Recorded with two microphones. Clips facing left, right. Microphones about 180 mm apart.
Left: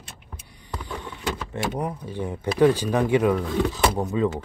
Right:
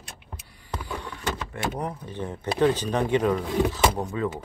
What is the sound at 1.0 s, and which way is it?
Vehicle, 20° left (ahead or behind).